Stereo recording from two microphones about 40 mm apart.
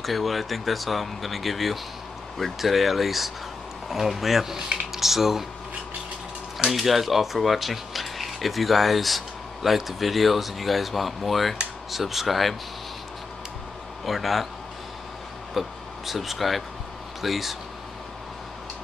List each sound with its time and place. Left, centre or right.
0.0 s speech: centre
6.6 s speech: centre
14.0 s speech: centre
15.6 s speech: centre